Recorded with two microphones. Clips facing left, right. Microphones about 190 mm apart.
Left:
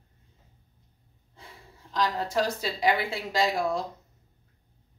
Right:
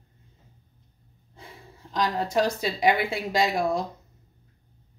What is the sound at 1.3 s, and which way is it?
Speech, 20° right (ahead or behind).